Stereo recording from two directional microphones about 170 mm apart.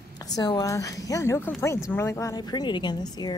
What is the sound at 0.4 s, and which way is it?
A woman's voice, 20° left (ahead or behind).